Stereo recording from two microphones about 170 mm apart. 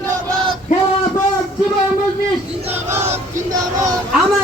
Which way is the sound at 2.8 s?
15° right (ahead or behind).